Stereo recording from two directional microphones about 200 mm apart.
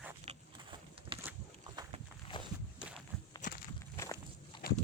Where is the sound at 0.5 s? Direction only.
25° right (ahead or behind).